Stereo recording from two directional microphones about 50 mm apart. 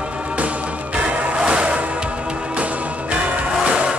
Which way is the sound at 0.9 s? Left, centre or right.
Right.